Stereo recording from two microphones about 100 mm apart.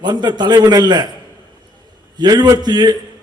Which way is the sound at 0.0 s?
45° right (ahead or behind).